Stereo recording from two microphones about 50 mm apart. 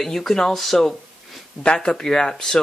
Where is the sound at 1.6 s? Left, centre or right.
Centre.